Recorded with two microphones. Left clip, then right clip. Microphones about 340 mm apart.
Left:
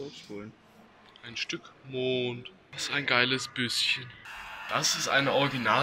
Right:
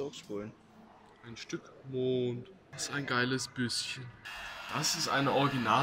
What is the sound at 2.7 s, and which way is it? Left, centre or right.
Speech, centre.